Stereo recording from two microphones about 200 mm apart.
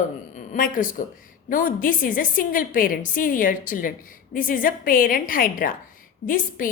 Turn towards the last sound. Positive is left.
turn(degrees=40)  # may be behind; listen again after turning